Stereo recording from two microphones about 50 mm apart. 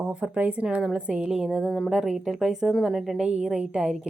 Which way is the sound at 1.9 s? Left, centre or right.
Centre.